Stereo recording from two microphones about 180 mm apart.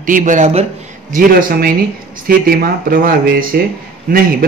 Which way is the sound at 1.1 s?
55° right (ahead or behind).